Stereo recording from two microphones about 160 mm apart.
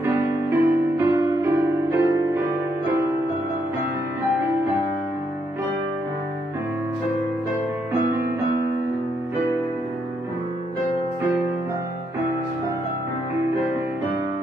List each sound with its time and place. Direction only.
0.0 s music: 15° right (ahead or behind)